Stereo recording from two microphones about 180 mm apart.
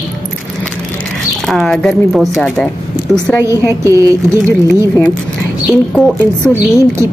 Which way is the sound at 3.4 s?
15° right (ahead or behind).